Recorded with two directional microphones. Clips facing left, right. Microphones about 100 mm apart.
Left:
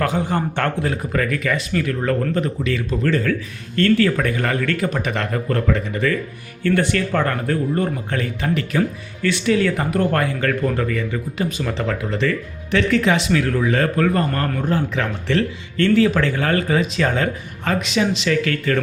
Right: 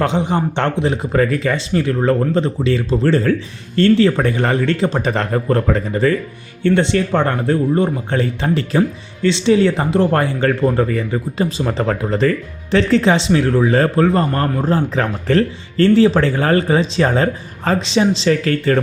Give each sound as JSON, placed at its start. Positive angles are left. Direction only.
{"t": 0.0, "sound": "speech", "side_deg": -20}